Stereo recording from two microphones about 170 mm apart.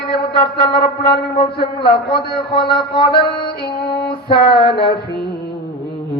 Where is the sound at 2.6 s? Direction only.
70° left (ahead or behind).